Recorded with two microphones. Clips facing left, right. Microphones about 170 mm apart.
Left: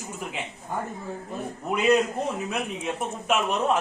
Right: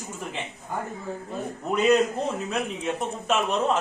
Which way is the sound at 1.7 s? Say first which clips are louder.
Right 1 dB; 10° left (ahead or behind).